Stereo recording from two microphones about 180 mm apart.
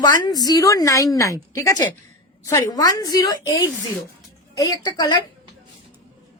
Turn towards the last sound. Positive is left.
turn(degrees=20)  # may be behind; listen again after turning